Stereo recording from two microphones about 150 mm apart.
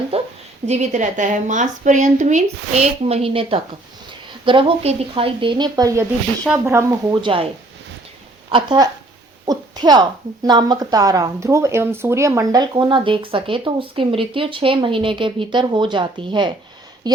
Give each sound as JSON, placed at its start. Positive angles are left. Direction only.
{"t": 0.1, "sound": "a sound", "side_deg": -40}
{"t": 0.7, "sound": "a woman's voice", "side_deg": -55}
{"t": 7.2, "sound": "a woman's voice", "side_deg": -35}
{"t": 8.4, "sound": "a woman's voice", "side_deg": -30}